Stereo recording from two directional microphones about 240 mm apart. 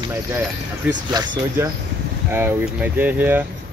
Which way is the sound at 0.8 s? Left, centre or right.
Centre.